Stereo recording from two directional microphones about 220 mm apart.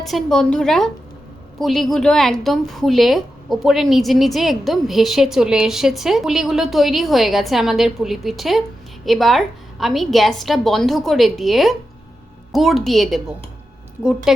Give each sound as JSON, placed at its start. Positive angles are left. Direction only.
{"t": 0.0, "sound": "a woman's voice", "side_deg": 0}
{"t": 14.3, "sound": "a woman's voice", "side_deg": 0}